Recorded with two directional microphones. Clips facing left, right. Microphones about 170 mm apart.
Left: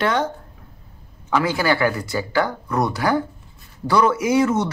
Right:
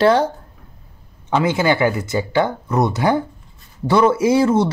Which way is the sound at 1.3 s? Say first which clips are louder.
Right 3 dB; 20° right (ahead or behind).